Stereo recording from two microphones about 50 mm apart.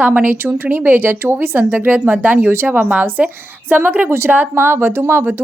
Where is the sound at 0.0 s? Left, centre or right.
Right.